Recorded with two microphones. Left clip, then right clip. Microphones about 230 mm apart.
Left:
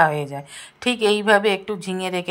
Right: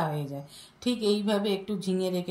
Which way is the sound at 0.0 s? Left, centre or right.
Left.